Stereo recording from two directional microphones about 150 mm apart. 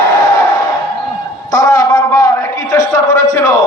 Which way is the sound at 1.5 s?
25° left (ahead or behind).